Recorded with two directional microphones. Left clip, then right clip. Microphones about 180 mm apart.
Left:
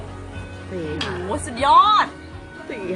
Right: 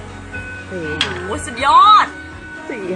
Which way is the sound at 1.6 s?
55° left (ahead or behind).